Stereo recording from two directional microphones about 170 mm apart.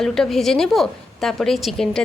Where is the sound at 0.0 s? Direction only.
Centre (ahead or behind).